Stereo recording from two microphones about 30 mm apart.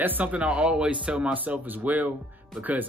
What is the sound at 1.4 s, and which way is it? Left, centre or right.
Speech, right.